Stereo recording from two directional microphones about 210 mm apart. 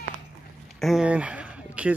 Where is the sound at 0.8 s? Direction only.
Centre (ahead or behind).